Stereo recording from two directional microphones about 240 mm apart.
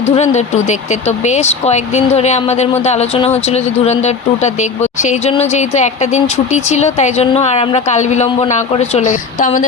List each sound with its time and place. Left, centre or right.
0.0 s speech: left